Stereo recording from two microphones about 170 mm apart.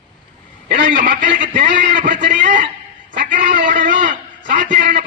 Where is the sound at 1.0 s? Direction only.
50° right (ahead or behind).